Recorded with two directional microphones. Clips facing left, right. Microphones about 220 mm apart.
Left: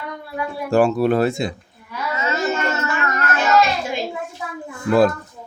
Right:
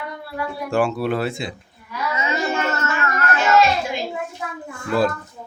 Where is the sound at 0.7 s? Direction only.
40° left (ahead or behind).